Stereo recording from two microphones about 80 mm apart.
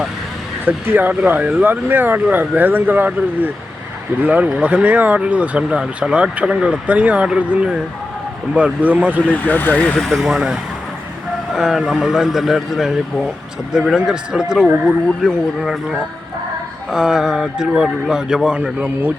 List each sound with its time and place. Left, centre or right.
0.6 s speech: right
9.3 s speech: left
10.0 s speech: centre